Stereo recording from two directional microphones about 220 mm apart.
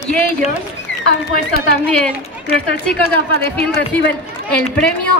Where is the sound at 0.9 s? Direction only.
55° left (ahead or behind).